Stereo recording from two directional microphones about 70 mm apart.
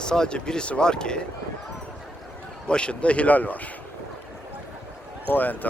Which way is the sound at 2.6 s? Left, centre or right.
Centre.